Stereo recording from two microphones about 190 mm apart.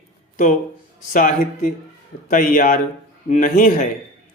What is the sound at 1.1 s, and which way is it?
Speech, 45° left (ahead or behind).